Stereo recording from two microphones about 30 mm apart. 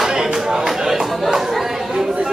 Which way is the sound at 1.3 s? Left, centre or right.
Centre.